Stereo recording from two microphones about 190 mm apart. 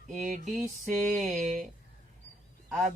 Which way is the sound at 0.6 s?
Centre (ahead or behind).